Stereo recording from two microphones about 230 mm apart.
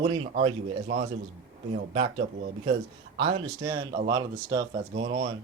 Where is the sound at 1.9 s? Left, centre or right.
Right.